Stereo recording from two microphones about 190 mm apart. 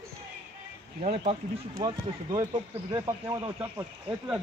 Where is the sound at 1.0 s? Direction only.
35° right (ahead or behind).